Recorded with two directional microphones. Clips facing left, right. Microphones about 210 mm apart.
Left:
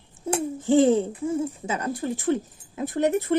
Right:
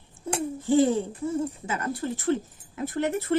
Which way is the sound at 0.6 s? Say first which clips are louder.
Left 3 dB; 20° left (ahead or behind).